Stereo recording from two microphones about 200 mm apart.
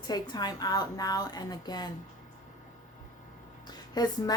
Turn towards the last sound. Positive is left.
turn(degrees=20)  # may be behind; listen again after turning